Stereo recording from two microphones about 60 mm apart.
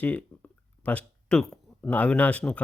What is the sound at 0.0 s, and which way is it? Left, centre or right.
Speech, left.